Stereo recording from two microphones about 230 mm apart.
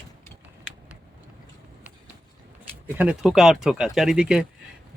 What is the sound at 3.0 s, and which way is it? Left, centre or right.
Speech, centre.